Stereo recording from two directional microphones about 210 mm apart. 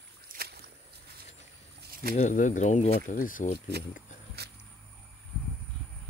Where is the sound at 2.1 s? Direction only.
35° left (ahead or behind).